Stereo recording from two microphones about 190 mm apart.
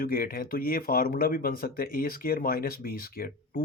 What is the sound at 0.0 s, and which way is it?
Speech, 50° left (ahead or behind).